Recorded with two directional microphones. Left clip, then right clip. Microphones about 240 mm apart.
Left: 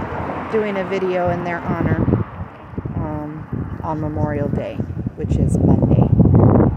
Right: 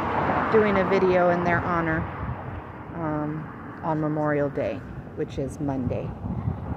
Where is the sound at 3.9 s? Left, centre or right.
Centre.